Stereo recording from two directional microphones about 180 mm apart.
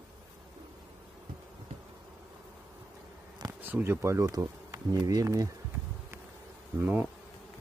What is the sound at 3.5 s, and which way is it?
Speech, 10° right (ahead or behind).